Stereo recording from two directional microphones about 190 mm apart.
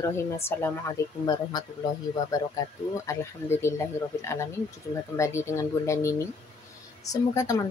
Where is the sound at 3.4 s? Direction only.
10° left (ahead or behind).